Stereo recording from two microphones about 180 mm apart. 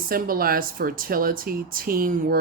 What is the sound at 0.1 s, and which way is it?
Speech, 55° right (ahead or behind).